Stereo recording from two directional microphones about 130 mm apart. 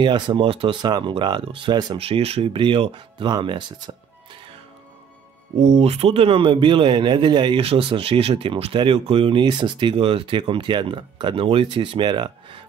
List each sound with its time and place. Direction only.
0.0 s speech: 35° right (ahead or behind)
2.0 s speech: 50° right (ahead or behind)
5.6 s speech: 55° right (ahead or behind); by 12.6 s 40° right (ahead or behind)